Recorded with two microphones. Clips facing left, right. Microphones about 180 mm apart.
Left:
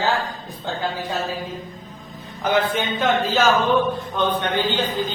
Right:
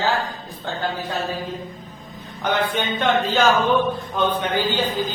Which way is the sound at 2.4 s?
5° left (ahead or behind).